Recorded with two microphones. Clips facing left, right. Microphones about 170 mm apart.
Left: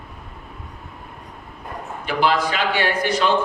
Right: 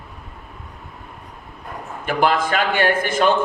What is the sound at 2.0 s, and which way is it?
A man's voice, 50° right (ahead or behind).